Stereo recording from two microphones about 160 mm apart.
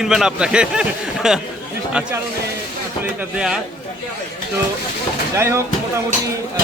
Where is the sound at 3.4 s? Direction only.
5° right (ahead or behind).